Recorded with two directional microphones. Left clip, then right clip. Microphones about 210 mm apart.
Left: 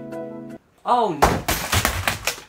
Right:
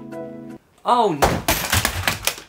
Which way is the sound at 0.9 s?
55° right (ahead or behind).